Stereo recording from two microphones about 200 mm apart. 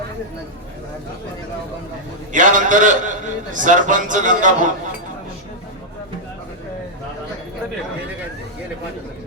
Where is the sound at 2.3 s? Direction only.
40° right (ahead or behind).